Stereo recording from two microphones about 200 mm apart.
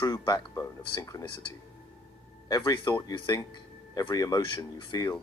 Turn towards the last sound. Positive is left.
turn(degrees=20)  # may be behind; listen again after turning